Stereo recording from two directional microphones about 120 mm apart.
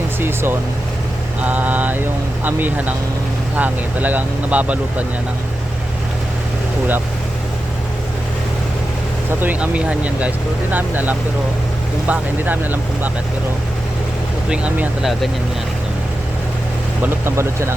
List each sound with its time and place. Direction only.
0.2 s speech: 20° right (ahead or behind)
9.4 s speech: 10° right (ahead or behind)
14.5 s speech: 10° right (ahead or behind)
17.0 s speech: 20° right (ahead or behind)